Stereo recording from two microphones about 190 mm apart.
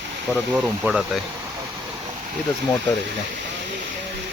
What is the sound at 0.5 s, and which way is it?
Speech, 5° right (ahead or behind).